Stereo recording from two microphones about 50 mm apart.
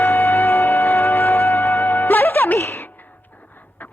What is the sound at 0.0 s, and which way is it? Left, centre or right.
Music, left.